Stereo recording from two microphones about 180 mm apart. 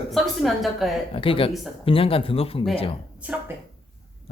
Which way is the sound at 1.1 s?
30° left (ahead or behind).